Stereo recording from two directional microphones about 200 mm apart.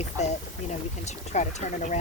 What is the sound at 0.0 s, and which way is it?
Speech, 35° left (ahead or behind).